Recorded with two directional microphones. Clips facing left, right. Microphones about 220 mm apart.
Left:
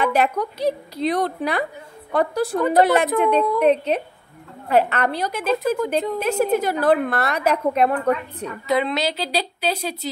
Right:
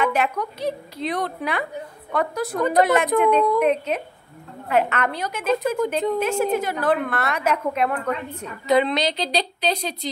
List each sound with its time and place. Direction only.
0.0 s a woman's voice: 35° left (ahead or behind)
8.6 s a woman's voice: 5° left (ahead or behind)